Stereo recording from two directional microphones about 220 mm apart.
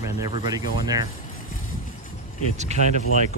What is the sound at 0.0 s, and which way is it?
Speech, 15° right (ahead or behind).